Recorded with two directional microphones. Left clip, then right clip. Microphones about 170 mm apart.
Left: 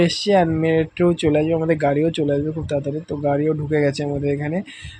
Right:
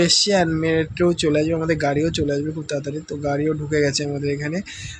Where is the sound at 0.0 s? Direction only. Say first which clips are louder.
Even; 15° left (ahead or behind).